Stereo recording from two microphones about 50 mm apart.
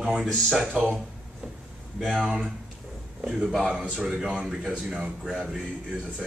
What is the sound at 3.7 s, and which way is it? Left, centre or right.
Speech, right.